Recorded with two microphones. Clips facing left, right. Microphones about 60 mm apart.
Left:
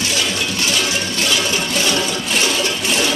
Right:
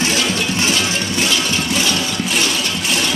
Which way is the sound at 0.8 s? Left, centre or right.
Centre.